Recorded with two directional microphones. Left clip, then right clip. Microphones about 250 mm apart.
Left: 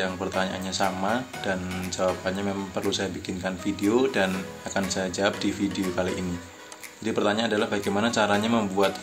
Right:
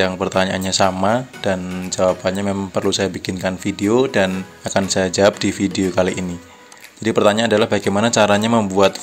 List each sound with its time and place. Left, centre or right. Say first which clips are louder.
0.0 s speech: right 10 dB; right